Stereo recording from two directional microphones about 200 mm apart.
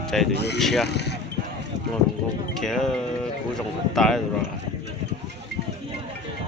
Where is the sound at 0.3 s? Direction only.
55° left (ahead or behind).